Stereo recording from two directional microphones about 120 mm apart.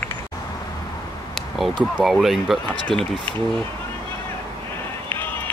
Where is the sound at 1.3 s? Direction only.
Centre (ahead or behind).